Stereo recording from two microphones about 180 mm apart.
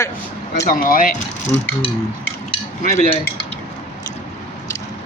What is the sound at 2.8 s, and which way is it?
Cutlery, 40° left (ahead or behind).